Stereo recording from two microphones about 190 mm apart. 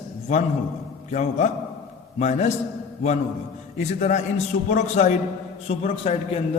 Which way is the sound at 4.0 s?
40° left (ahead or behind).